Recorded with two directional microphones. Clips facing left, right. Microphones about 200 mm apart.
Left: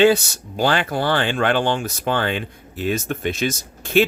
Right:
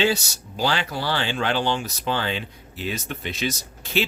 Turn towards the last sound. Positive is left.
turn(degrees=50)  # may be behind; listen again after turning